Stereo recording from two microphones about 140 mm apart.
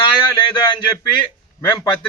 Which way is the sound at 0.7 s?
30° left (ahead or behind).